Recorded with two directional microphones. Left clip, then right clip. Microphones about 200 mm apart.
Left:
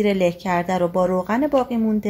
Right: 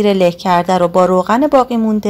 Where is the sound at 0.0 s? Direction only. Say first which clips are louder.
Right 7 dB; 25° right (ahead or behind).